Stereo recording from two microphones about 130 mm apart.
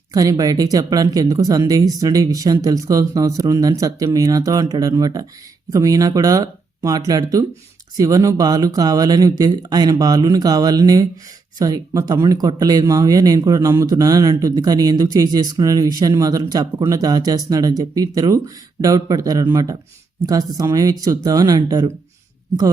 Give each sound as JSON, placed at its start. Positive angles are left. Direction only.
{"t": 0.1, "sound": "speech", "side_deg": -30}